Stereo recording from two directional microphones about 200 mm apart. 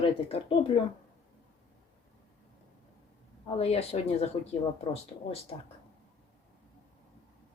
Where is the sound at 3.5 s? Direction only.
30° left (ahead or behind).